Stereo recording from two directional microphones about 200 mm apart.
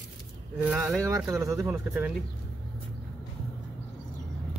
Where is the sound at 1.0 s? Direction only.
15° right (ahead or behind).